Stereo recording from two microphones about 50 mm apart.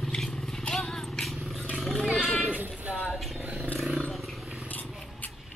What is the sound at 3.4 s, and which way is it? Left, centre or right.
Roaring cats, right.